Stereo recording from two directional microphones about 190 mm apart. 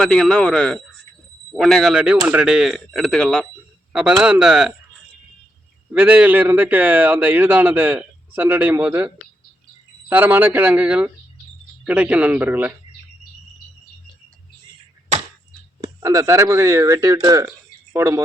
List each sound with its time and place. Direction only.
0.0 s speech: 5° left (ahead or behind)
5.9 s speech: 5° right (ahead or behind)
10.1 s speech: 10° right (ahead or behind)
15.8 s speech: 20° right (ahead or behind)